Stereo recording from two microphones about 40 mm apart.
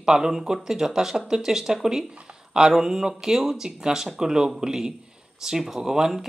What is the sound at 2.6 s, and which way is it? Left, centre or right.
Speech, centre.